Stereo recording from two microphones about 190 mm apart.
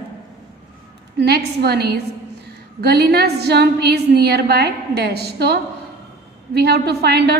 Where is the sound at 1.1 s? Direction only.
60° right (ahead or behind).